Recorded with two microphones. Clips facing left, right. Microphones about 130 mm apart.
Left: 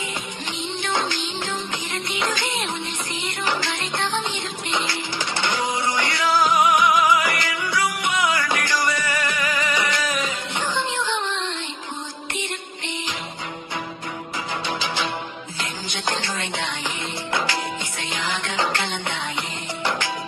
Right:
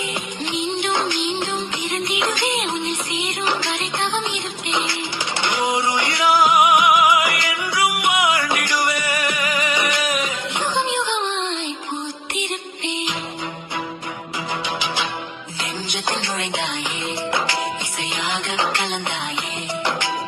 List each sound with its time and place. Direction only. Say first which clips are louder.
0.5 s music: right 4 dB; 15° right (ahead or behind)
15.9 s music: right 1 dB; 20° right (ahead or behind)
18.1 s music: right 1 dB; 20° right (ahead or behind)